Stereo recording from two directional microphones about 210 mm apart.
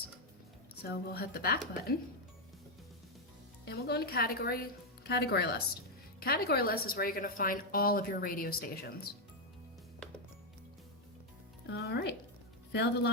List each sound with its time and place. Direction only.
0.8 s a woman's voice: 50° left (ahead or behind)
3.7 s a woman's voice: 50° left (ahead or behind)
11.6 s a woman's voice: 55° left (ahead or behind)